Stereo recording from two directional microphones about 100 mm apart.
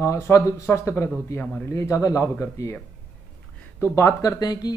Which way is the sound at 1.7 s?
30° left (ahead or behind).